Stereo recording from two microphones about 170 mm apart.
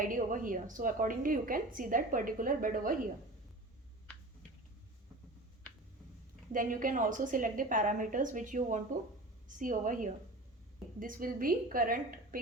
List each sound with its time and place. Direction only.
0.0 s a woman's voice: 50° right (ahead or behind)
5.7 s a sound: 5° left (ahead or behind)
6.5 s a woman's voice: 55° right (ahead or behind)